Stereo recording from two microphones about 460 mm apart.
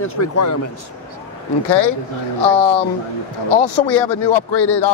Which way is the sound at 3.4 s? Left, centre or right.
Left.